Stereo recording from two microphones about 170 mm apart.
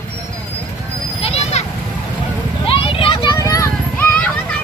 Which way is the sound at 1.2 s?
40° left (ahead or behind).